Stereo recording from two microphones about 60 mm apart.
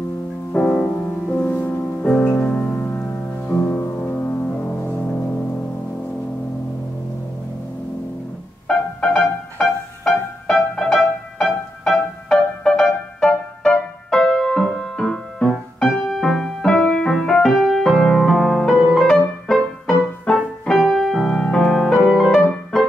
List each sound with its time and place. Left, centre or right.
0.5 s music: centre
1.4 s music: left
3.7 s music: left
8.6 s music: centre